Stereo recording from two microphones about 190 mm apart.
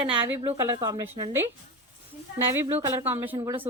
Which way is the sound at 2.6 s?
20° right (ahead or behind).